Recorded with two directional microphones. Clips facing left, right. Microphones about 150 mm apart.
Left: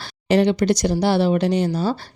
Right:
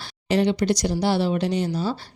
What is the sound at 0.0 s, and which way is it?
Speech, 65° left (ahead or behind).